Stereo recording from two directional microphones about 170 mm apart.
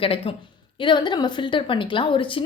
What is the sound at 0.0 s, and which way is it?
A woman's voice, 35° left (ahead or behind).